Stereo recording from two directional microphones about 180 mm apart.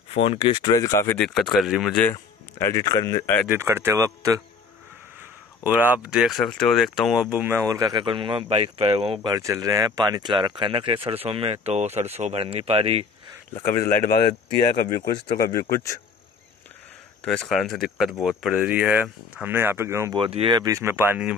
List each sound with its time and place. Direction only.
0.1 s speech: 30° left (ahead or behind); by 1.2 s 15° left (ahead or behind)
1.2 s speech: 5° left (ahead or behind)
2.1 s speech: 20° left (ahead or behind)
3.5 s speech: 15° right (ahead or behind)
5.6 s speech: 10° right (ahead or behind); by 13.0 s 30° right (ahead or behind)
13.8 s speech: 50° left (ahead or behind)
15.1 s speech: 25° left (ahead or behind)
17.2 s speech: 5° left (ahead or behind); by 20.2 s 15° right (ahead or behind)
20.2 s speech: 30° right (ahead or behind); by 21.4 s 10° right (ahead or behind)